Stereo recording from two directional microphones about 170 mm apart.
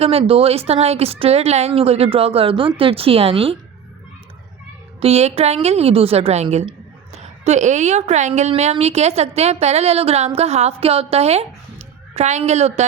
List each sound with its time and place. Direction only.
0.0 s speech: 35° right (ahead or behind)
4.9 s a woman's voice: 35° right (ahead or behind)